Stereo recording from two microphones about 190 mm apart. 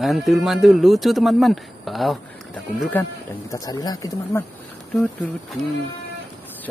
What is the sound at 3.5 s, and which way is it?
Speech, 20° left (ahead or behind).